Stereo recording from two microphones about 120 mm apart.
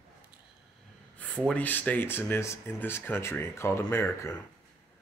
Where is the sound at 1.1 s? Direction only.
10° left (ahead or behind).